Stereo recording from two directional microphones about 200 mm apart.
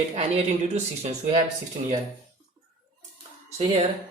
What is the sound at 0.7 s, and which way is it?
Speech, 30° right (ahead or behind).